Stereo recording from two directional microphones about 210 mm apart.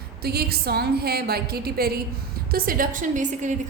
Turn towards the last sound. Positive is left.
turn(degrees=-40)  # may be behind; listen again after turning